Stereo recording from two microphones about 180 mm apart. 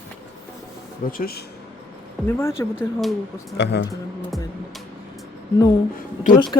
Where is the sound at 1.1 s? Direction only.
55° left (ahead or behind).